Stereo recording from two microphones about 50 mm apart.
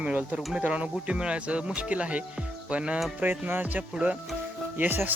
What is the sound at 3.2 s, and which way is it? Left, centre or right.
Speech, right.